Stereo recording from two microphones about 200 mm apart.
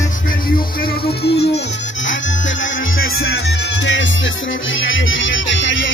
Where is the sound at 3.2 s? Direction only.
55° left (ahead or behind).